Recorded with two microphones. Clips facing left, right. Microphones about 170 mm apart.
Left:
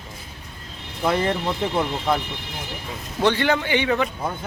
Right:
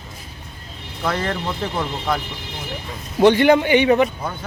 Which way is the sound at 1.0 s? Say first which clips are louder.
Left 2 dB; 15° left (ahead or behind).